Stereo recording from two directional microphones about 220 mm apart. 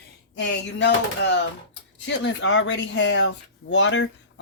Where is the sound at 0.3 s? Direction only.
55° left (ahead or behind).